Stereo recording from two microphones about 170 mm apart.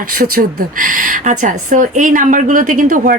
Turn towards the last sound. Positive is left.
turn(degrees=-50)  # may be behind; listen again after turning